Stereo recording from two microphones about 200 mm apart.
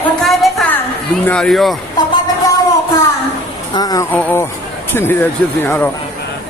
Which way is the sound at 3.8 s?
20° left (ahead or behind).